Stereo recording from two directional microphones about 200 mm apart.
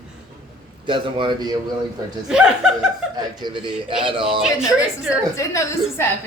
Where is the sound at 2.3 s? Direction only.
5° right (ahead or behind).